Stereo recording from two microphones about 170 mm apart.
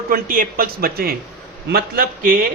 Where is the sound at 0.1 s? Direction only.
55° right (ahead or behind).